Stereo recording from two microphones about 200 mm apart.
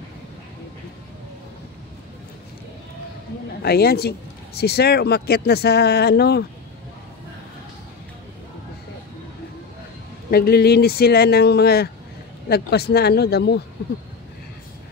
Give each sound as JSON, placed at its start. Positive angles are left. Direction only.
{"t": 3.6, "sound": "speech", "side_deg": 50}
{"t": 10.3, "sound": "speech", "side_deg": 50}